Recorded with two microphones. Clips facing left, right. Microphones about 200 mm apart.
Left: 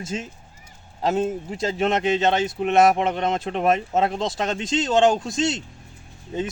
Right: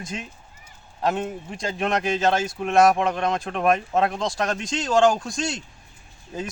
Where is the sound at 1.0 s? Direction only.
25° left (ahead or behind).